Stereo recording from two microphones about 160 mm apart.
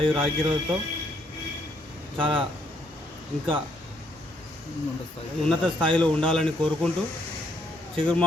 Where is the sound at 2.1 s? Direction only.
30° right (ahead or behind).